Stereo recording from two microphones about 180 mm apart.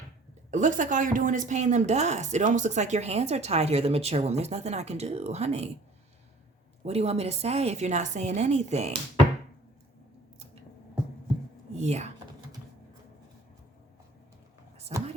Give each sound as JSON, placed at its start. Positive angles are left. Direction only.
{"t": 0.5, "sound": "speech", "side_deg": -45}
{"t": 6.8, "sound": "speech", "side_deg": -35}
{"t": 11.7, "sound": "speech", "side_deg": -40}
{"t": 14.9, "sound": "speech", "side_deg": -35}